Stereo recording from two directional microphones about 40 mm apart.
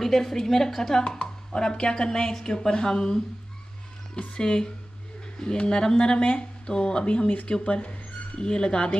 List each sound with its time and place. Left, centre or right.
0.0 s a woman's voice: centre
1.0 s speech: left
4.1 s speech: left
4.4 s speech: centre